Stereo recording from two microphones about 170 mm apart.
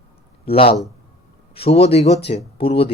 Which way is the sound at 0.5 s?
35° left (ahead or behind).